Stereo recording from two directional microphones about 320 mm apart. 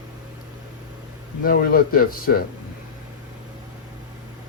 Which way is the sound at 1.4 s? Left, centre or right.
Left.